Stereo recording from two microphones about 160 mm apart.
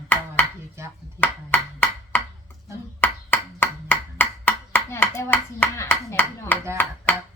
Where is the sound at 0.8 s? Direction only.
15° right (ahead or behind).